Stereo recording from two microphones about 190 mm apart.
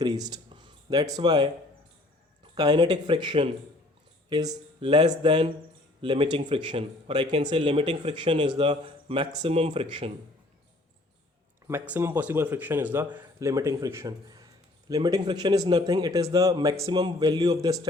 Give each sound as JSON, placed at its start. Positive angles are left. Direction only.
{"t": 0.0, "sound": "a sound", "side_deg": -20}
{"t": 1.1, "sound": "a man's voice", "side_deg": -20}
{"t": 2.6, "sound": "a man's voice", "side_deg": -20}
{"t": 11.7, "sound": "a man's voice", "side_deg": -10}